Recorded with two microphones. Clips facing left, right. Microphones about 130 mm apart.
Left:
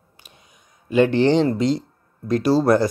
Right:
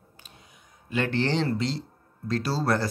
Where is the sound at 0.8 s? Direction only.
15° left (ahead or behind).